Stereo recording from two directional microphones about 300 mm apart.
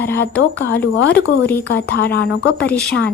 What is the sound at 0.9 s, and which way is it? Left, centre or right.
A woman's voice, left.